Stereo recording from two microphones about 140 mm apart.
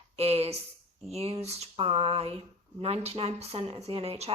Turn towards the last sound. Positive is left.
turn(degrees=-45)  # may be behind; listen again after turning